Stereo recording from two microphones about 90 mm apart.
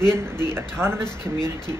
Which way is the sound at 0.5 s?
30° right (ahead or behind).